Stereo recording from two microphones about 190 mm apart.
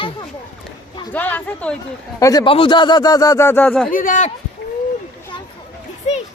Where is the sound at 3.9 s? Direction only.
45° left (ahead or behind).